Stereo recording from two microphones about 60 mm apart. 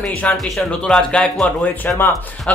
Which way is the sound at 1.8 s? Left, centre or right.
Left.